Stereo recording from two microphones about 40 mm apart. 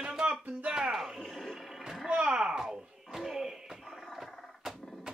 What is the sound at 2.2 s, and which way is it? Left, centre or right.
Speech, centre.